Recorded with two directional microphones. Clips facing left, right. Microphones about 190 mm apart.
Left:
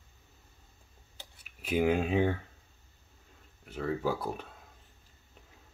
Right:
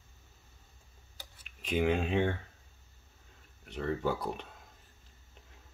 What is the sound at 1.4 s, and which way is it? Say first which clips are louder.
Speech: left 2 dB; 10° left (ahead or behind).